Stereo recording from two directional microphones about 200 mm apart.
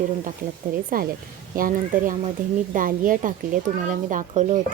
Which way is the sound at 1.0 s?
45° right (ahead or behind).